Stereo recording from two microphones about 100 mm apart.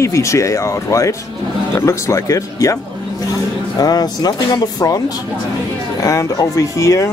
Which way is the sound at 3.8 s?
40° left (ahead or behind).